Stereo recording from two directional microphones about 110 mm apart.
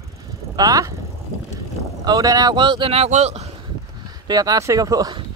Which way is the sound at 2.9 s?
70° right (ahead or behind).